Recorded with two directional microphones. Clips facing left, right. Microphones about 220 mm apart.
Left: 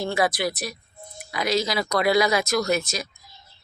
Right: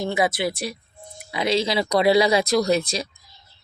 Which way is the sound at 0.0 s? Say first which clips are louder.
Right 1 dB; 20° right (ahead or behind).